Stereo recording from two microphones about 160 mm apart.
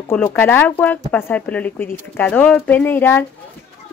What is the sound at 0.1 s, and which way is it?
Speech, 15° left (ahead or behind).